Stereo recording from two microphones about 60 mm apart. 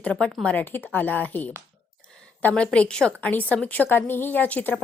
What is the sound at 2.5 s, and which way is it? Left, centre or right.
Speech, centre.